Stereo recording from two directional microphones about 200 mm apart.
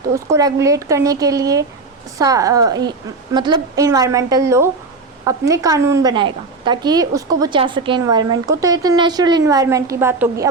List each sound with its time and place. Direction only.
0.1 s a woman's voice: 15° right (ahead or behind)